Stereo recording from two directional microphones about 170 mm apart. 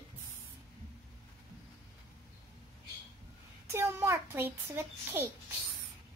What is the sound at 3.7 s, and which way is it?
A child's voice, 15° right (ahead or behind).